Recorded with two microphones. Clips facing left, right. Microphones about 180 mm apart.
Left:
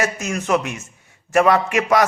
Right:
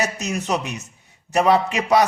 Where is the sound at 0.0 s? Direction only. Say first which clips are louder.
Left 1 dB; 20° right (ahead or behind).